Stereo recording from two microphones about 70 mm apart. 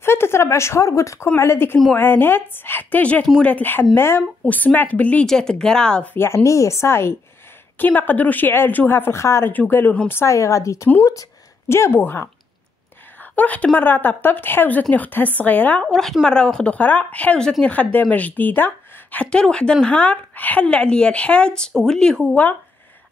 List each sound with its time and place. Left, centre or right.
0.0 s a woman's voice: left
4.5 s a woman's voice: left
5.2 s speech: centre
6.1 s speech: left
7.8 s a woman's voice: left
9.5 s a woman's voice: left
10.2 s speech: left
13.2 s a sound: left
13.7 s a woman's voice: left
15.8 s a woman's voice: centre
18.1 s a woman's voice: left
19.1 s speech: centre